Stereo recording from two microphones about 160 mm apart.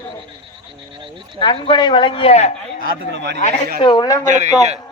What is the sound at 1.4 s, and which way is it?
A man's voice, 30° left (ahead or behind).